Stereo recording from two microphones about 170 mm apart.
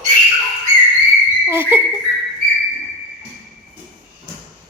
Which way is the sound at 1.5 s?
15° right (ahead or behind).